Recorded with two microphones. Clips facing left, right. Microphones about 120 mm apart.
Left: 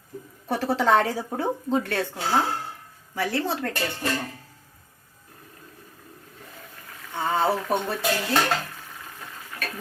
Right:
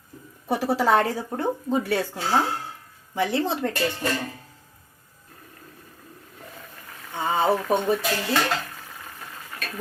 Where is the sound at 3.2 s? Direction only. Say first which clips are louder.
Right 2 dB; 20° right (ahead or behind).